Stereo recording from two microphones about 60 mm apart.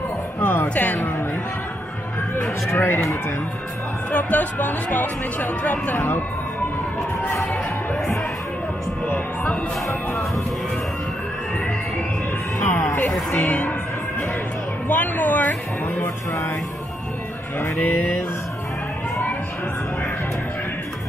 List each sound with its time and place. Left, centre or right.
0.4 s music: left
2.7 s a sound: left
4.1 s speech: left
5.9 s a sound: left
9.0 s music: left
9.8 s music: left
13.4 s speech: left
14.9 s speech: left
17.7 s a sound: left